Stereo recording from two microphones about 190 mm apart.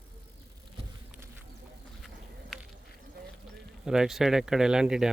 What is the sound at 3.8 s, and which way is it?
Speech, 5° right (ahead or behind).